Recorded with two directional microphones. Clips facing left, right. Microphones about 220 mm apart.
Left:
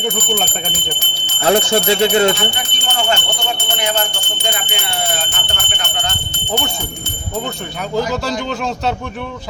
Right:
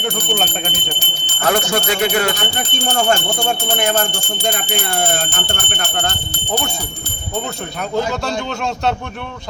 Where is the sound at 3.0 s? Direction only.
45° right (ahead or behind).